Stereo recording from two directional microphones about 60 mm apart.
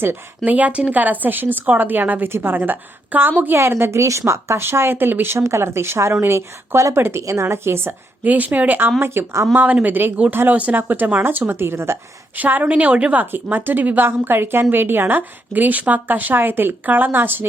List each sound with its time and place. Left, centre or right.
0.4 s a woman's voice: right
4.0 s a woman's voice: right
5.4 s a woman's voice: right
8.2 s a woman's voice: right
9.0 s a woman's voice: right
9.8 s a woman's voice: right
12.4 s a woman's voice: right
13.3 s a woman's voice: right